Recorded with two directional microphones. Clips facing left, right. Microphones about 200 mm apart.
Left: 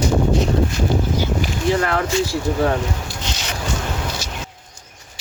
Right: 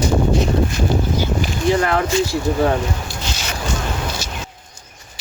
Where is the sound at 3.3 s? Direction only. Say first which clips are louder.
Even; 20° left (ahead or behind).